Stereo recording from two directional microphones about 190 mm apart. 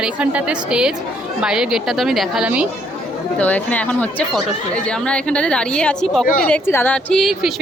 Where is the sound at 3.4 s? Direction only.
10° left (ahead or behind).